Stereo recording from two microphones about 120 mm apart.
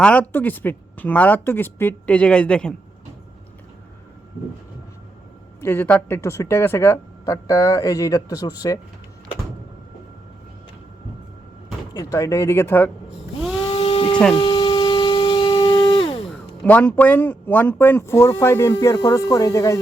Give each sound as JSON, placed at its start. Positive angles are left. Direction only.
{"t": 0.0, "sound": "speech", "side_deg": 10}
{"t": 5.5, "sound": "speech", "side_deg": 15}
{"t": 11.9, "sound": "speech", "side_deg": 30}
{"t": 13.6, "sound": "sheep", "side_deg": 50}
{"t": 14.3, "sound": "a sound", "side_deg": 45}
{"t": 16.6, "sound": "speech", "side_deg": 15}